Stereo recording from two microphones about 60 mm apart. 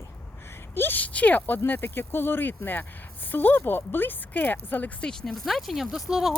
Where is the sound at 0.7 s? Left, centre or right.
Left.